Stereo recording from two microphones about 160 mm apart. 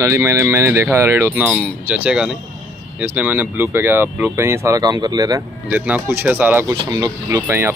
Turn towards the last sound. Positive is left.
turn(degrees=-20)  # may be behind; listen again after turning